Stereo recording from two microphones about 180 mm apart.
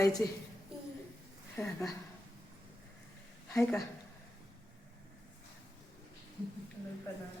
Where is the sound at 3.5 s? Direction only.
15° left (ahead or behind).